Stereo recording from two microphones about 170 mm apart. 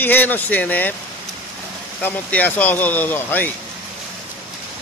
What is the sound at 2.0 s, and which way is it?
Speech, 10° left (ahead or behind).